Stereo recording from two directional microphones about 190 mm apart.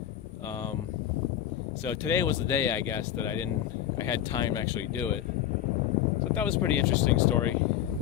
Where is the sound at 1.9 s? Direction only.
15° left (ahead or behind).